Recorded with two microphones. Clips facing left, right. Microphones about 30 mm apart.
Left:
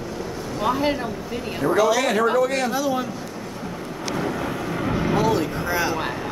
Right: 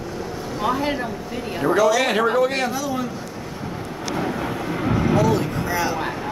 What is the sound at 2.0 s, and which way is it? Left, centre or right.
Speech, right.